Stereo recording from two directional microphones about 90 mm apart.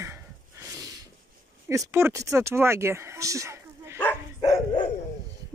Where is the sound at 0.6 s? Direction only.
30° right (ahead or behind).